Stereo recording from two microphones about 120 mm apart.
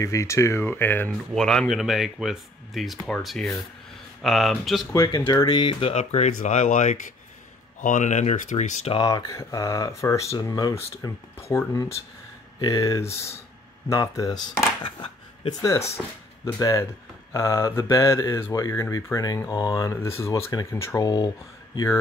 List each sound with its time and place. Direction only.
0.0 s speech: 25° left (ahead or behind)
1.3 s speech: 5° left (ahead or behind)
4.9 s speech: 30° left (ahead or behind); by 8.9 s 80° left
8.9 s speech: 30° left (ahead or behind)
14.8 s a sound: 45° left (ahead or behind)
16.5 s speech: 25° left (ahead or behind)